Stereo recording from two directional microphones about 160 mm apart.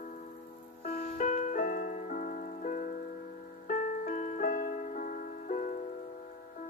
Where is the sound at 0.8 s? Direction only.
50° left (ahead or behind).